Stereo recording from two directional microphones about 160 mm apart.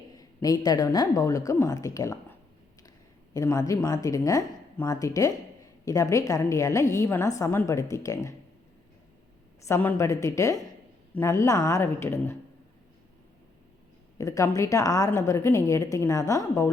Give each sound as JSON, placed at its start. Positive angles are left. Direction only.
{"t": 0.4, "sound": "a woman's voice", "side_deg": 25}
{"t": 3.3, "sound": "a woman's voice", "side_deg": 20}
{"t": 9.6, "sound": "a woman's voice", "side_deg": 15}
{"t": 14.2, "sound": "a woman's voice", "side_deg": 20}